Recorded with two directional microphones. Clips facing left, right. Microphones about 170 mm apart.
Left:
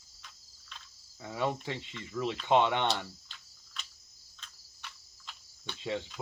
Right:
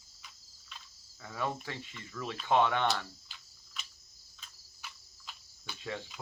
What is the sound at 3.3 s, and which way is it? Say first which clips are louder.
Cricket: left 1 dB; 5° right (ahead or behind).